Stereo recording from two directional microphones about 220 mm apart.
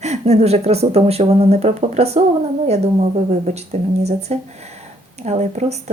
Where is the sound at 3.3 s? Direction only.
30° right (ahead or behind).